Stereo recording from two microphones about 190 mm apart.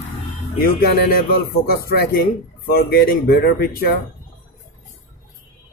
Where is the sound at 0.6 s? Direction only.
55° left (ahead or behind).